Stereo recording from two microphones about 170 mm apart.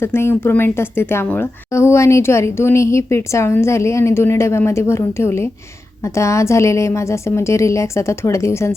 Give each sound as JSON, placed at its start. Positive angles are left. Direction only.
{"t": 0.0, "sound": "a woman's voice", "side_deg": 15}